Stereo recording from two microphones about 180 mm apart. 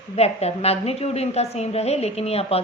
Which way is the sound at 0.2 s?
35° left (ahead or behind).